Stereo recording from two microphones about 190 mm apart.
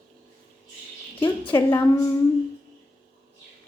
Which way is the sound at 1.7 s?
15° left (ahead or behind).